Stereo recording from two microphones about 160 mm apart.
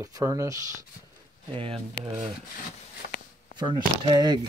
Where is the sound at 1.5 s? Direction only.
35° right (ahead or behind).